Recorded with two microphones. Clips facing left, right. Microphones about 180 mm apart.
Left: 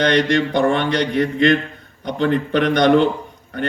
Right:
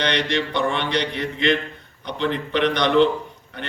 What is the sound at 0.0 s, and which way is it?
A man's voice, 45° left (ahead or behind).